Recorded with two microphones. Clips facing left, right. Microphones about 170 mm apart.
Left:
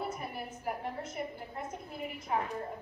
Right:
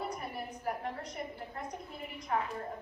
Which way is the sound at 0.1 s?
5° left (ahead or behind).